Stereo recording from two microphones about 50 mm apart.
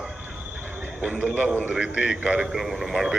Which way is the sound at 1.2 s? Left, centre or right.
Right.